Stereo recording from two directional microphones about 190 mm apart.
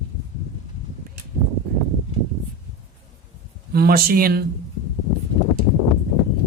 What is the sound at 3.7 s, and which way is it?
Speech, 50° right (ahead or behind).